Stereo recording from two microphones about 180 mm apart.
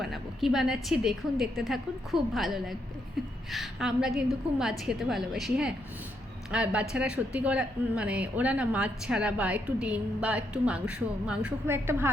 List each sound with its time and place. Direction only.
0.0 s a woman's voice: centre (ahead or behind)